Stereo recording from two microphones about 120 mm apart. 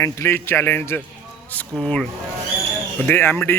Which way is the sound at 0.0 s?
20° left (ahead or behind).